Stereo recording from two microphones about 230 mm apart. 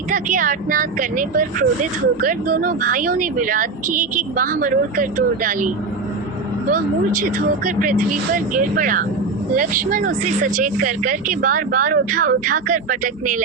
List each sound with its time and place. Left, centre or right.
0.1 s speech: right
6.7 s speech: right